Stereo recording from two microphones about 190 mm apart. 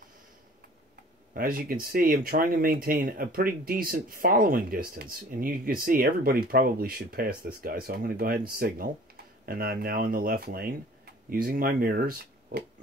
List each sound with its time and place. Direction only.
1.3 s speech: 50° right (ahead or behind)